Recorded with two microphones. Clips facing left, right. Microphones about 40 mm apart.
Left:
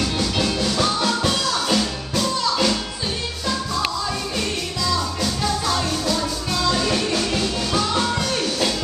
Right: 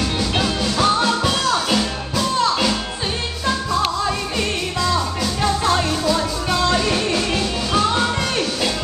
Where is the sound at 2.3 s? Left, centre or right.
Right.